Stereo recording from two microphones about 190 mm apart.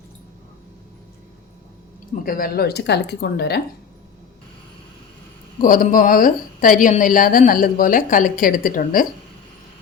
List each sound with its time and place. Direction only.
2.2 s speech: 50° left (ahead or behind)
5.5 s a woman's voice: 45° left (ahead or behind)